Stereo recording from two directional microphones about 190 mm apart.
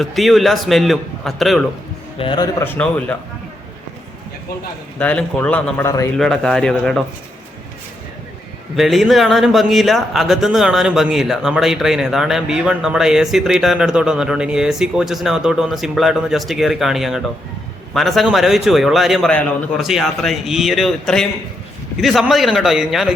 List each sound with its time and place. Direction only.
0.0 s a man's voice: centre (ahead or behind)
2.1 s a man's voice: 25° left (ahead or behind)
2.6 s a man's voice: 10° left (ahead or behind)
4.9 s a man's voice: 5° left (ahead or behind)
6.1 s a man's voice: centre (ahead or behind)
8.7 s a man's voice: centre (ahead or behind)